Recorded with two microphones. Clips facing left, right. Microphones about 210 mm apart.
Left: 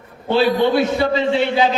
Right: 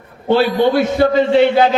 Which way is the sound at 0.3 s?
45° right (ahead or behind).